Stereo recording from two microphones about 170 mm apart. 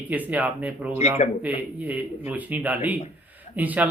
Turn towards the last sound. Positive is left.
turn(degrees=-10)  # may be behind; listen again after turning